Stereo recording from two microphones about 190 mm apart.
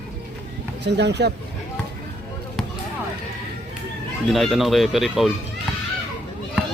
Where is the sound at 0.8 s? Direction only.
65° right (ahead or behind).